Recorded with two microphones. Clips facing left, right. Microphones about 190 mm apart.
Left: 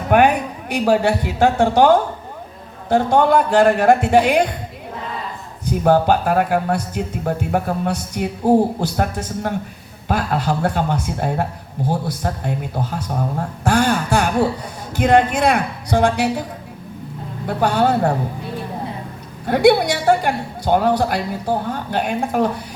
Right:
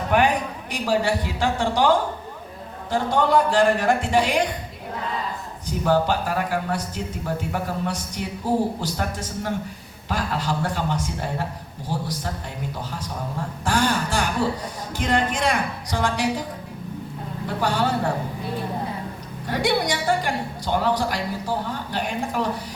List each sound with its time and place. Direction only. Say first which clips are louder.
0.1 s speech: left 6 dB; 55° left (ahead or behind)
5.8 s speech: left 6 dB; 55° left (ahead or behind)
13.7 s a sound: left 5 dB; 60° left (ahead or behind)
14.9 s speech: left 8 dB; 60° left (ahead or behind)
17.6 s speech: left 7 dB; 55° left (ahead or behind)
19.5 s speech: left 9 dB; 55° left (ahead or behind)